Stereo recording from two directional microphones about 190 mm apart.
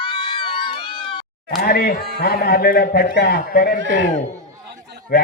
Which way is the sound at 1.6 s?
50° left (ahead or behind).